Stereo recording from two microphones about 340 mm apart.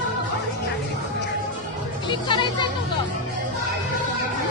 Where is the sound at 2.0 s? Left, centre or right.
Centre.